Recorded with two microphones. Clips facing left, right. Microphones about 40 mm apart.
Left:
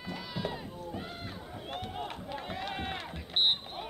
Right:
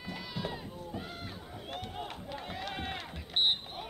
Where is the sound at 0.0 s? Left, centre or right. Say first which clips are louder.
Left 2 dB; centre.